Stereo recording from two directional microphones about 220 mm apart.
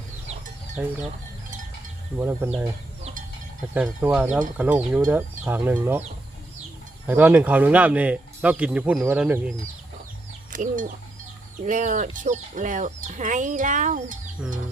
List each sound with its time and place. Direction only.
0.8 s speech: 5° right (ahead or behind)
2.1 s speech: 10° right (ahead or behind)
3.8 s speech: 5° right (ahead or behind)
7.1 s speech: 10° right (ahead or behind)
10.5 s speech: 35° right (ahead or behind)